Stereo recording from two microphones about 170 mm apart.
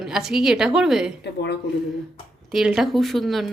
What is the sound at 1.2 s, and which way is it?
Speech, 80° left.